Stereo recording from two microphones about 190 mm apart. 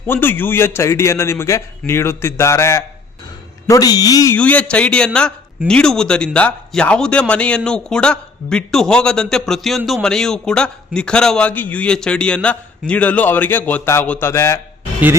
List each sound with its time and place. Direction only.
0.1 s a man's voice: 10° left (ahead or behind)
4.4 s a man's voice: 5° left (ahead or behind)